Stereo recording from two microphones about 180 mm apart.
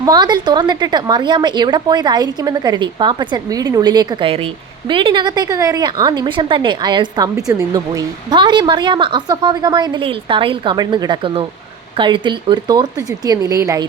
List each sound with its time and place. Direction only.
0.0 s a woman's voice: 20° right (ahead or behind)